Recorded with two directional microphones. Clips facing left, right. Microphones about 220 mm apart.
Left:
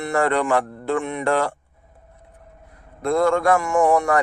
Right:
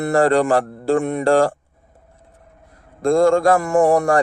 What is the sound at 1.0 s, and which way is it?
Speech, 50° right (ahead or behind).